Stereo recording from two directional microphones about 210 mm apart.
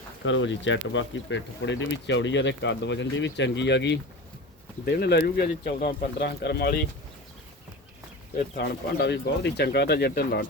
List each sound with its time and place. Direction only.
0.3 s speech: 60° left (ahead or behind)
8.5 s speech: 50° left (ahead or behind)